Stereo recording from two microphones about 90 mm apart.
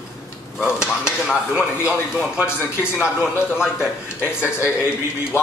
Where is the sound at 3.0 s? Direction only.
25° left (ahead or behind).